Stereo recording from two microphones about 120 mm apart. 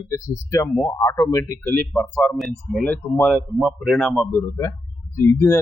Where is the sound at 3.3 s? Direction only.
5° right (ahead or behind).